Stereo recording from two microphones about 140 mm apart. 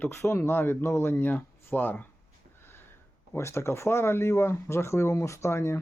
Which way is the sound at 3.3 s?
20° left (ahead or behind).